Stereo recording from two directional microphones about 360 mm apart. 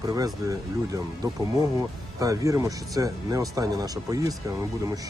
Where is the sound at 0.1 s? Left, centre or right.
Centre.